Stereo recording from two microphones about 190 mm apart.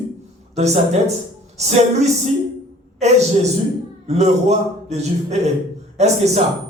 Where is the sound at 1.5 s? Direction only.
35° right (ahead or behind).